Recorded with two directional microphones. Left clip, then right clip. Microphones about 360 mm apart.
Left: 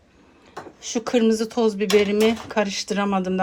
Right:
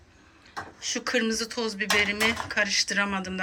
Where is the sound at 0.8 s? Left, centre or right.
Centre.